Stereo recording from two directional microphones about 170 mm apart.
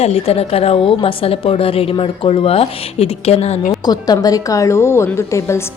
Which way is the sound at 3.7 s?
25° left (ahead or behind).